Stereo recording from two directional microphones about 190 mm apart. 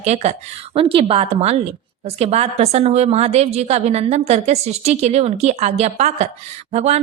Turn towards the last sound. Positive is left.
turn(degrees=-35)  # may be behind; listen again after turning